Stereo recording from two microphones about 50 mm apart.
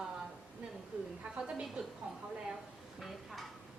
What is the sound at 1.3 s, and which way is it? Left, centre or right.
Speech, centre.